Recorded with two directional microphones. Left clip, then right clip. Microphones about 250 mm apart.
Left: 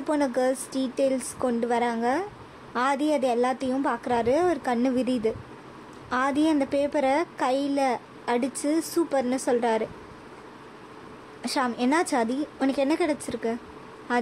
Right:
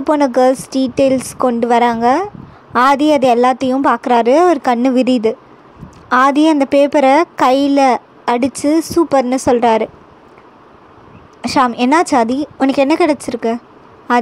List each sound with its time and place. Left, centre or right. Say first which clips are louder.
0.0 s a woman's voice: right 13 dB; right
11.4 s a woman's voice: right 13 dB; right